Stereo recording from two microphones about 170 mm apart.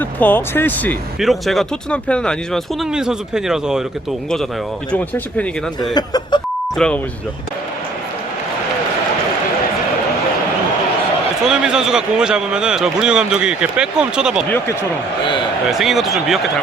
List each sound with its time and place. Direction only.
0.0 s speech: 10° left (ahead or behind)
1.2 s a man's voice: centre (ahead or behind)
4.9 s speech: 10° left (ahead or behind)
5.9 s speech: 25° left (ahead or behind)
6.7 s a man's voice: 5° left (ahead or behind)
11.4 s a man's voice: 5° right (ahead or behind)
15.7 s a man's voice: centre (ahead or behind)